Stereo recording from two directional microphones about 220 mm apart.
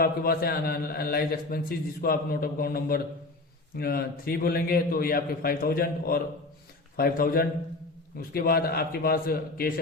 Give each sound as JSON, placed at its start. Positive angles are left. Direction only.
{"t": 0.0, "sound": "a man's voice", "side_deg": 45}